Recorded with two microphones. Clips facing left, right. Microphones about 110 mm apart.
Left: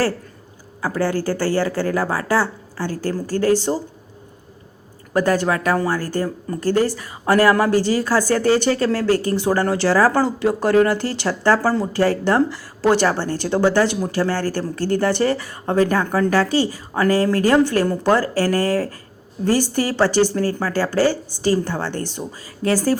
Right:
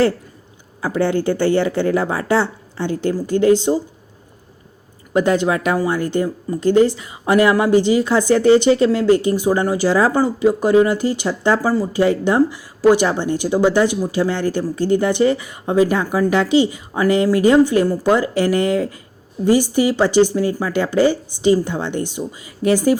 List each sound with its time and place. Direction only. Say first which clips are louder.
0.8 s speech: right 3 dB; 20° right (ahead or behind)
5.1 s speech: right 2 dB; 20° right (ahead or behind)